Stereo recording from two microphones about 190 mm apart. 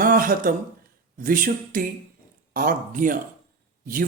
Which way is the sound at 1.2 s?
45° right (ahead or behind).